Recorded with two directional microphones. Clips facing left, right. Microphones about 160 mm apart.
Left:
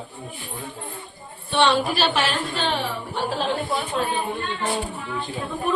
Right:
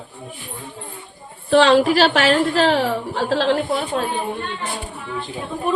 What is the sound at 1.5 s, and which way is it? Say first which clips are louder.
A woman's voice: right 7 dB; 90° right.